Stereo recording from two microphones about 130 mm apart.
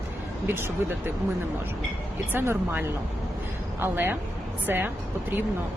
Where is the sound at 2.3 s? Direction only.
20° right (ahead or behind).